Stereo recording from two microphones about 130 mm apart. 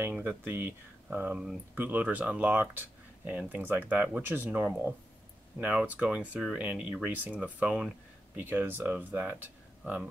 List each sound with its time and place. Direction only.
0.0 s speech: 15° right (ahead or behind)